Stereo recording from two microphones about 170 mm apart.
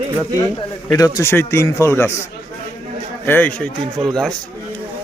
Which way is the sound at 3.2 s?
10° left (ahead or behind).